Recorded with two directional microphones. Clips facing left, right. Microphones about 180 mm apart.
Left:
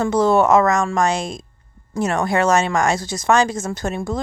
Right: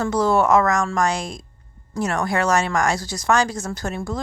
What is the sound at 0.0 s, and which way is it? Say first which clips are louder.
Speech: left 3 dB; 25° left (ahead or behind).